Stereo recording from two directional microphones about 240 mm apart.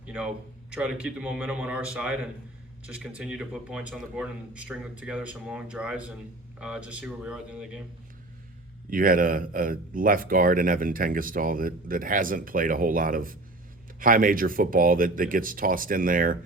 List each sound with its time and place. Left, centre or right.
0.0 s a sound: centre
0.7 s speech: centre
8.9 s speech: right